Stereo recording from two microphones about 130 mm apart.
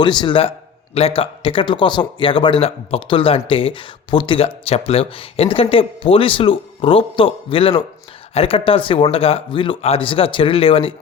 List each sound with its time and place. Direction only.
0.0 s a man's voice: 35° left (ahead or behind)